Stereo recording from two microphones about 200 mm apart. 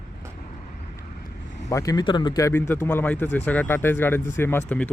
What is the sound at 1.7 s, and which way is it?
Speech, 20° left (ahead or behind).